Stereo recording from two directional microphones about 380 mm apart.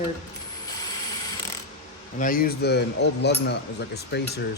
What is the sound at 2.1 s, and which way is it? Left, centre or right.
Speech, left.